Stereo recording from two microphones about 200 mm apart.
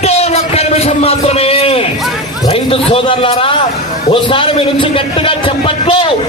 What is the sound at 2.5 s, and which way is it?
A man's voice, 30° left (ahead or behind).